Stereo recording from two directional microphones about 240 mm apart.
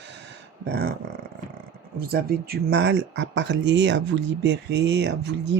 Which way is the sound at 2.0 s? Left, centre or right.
Right.